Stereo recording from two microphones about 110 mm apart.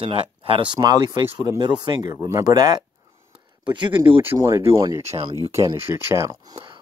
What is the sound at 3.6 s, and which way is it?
Speech, 50° right (ahead or behind).